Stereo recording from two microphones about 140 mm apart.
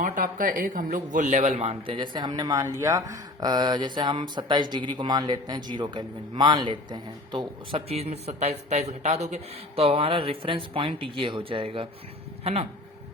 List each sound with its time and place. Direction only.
0.0 s a man's voice: 75° right (ahead or behind); by 7.8 s 30° right (ahead or behind)
7.9 s speech: 50° right (ahead or behind)